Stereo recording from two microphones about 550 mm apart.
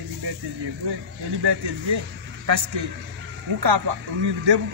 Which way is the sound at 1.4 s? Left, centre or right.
Right.